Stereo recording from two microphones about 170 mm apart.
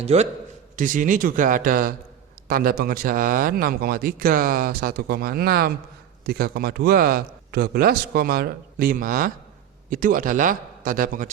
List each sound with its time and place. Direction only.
0.0 s a man's voice: 40° right (ahead or behind)
0.8 s a man's voice: 50° right (ahead or behind)